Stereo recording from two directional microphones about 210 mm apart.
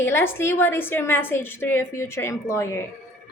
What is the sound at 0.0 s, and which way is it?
A woman's voice, 10° left (ahead or behind).